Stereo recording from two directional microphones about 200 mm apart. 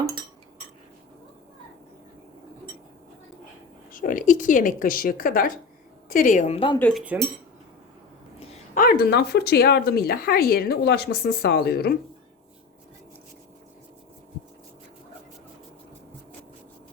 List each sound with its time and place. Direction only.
3.9 s a woman's voice: 45° left (ahead or behind)
6.7 s cutlery: 5° left (ahead or behind)
8.7 s speech: 45° left (ahead or behind)